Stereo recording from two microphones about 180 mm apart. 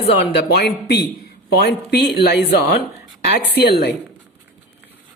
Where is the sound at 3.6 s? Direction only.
60° left (ahead or behind).